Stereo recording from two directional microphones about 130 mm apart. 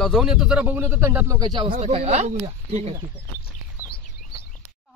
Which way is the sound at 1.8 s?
50° right (ahead or behind).